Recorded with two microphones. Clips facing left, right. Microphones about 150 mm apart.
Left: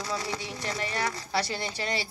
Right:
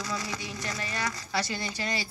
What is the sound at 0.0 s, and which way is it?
Speech, 30° left (ahead or behind).